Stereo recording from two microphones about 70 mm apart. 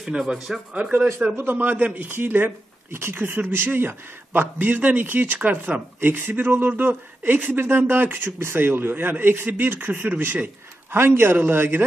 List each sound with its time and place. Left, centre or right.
0.0 s speech: centre
0.7 s speech: centre